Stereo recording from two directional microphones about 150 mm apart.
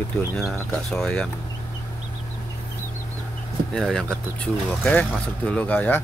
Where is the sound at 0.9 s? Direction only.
5° left (ahead or behind).